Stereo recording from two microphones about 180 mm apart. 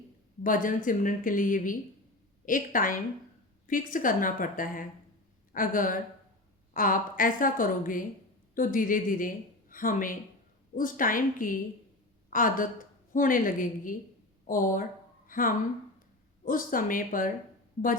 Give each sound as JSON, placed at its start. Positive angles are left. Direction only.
{"t": 0.4, "sound": "a woman's voice", "side_deg": 50}